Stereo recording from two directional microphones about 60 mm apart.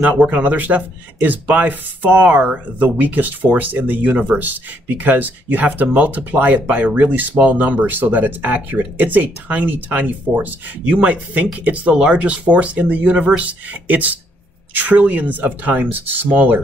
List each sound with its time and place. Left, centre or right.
0.0 s speech: right